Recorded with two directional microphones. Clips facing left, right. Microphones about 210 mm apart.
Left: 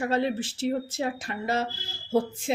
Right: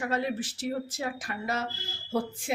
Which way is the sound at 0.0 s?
30° left (ahead or behind).